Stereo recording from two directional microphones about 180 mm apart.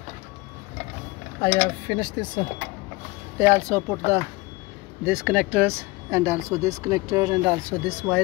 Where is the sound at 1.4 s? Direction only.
25° left (ahead or behind).